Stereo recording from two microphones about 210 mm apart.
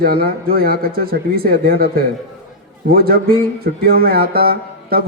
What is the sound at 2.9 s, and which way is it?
A man's voice, 45° right (ahead or behind).